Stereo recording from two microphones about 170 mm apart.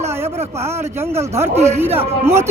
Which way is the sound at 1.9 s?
15° right (ahead or behind).